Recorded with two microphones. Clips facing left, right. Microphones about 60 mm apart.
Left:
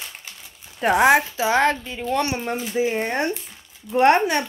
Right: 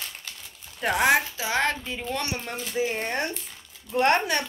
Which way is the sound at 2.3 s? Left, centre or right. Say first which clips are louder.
Left 7 dB; centre.